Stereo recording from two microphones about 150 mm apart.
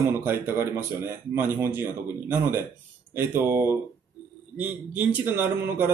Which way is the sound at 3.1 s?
15° right (ahead or behind).